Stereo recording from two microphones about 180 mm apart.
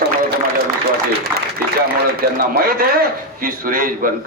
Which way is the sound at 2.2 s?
55° right (ahead or behind).